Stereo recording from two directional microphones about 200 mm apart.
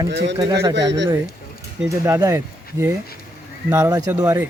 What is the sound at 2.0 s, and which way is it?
Speech, 15° right (ahead or behind).